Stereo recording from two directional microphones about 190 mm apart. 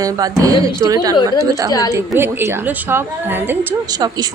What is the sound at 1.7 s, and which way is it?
Speech, 20° left (ahead or behind).